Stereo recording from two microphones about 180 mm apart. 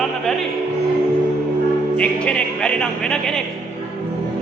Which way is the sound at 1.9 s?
5° left (ahead or behind).